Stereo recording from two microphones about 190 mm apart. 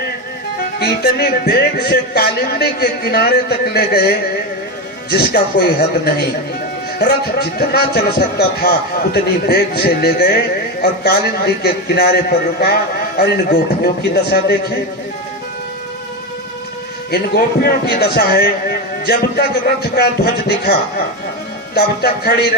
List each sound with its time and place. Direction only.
0.8 s a man's voice: 55° left (ahead or behind)
5.1 s a man's voice: 60° left (ahead or behind)
17.1 s a man's voice: 55° left (ahead or behind)
21.8 s a man's voice: 55° left (ahead or behind)